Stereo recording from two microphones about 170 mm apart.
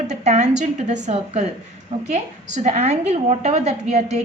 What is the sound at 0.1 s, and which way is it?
A woman's voice, 40° right (ahead or behind).